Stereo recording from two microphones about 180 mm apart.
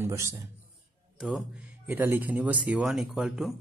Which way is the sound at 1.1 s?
5° right (ahead or behind).